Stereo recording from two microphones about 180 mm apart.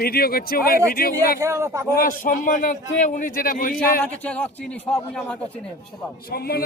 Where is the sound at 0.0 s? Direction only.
55° left (ahead or behind).